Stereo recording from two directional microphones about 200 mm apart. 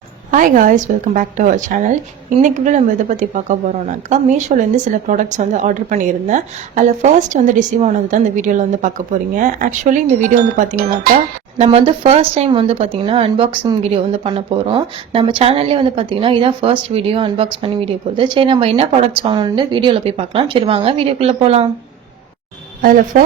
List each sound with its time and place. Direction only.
0.3 s speech: 40° right (ahead or behind)
22.8 s speech: 45° right (ahead or behind)